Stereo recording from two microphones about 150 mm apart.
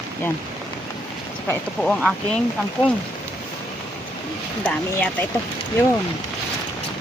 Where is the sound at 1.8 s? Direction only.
5° left (ahead or behind).